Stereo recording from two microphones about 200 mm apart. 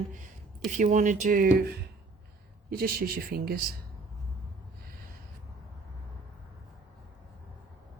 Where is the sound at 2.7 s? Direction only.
45° right (ahead or behind).